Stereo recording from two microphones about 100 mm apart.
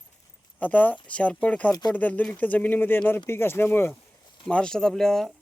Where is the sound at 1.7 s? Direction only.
45° left (ahead or behind).